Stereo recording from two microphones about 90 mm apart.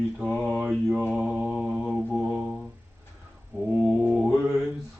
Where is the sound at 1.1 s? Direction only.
10° right (ahead or behind).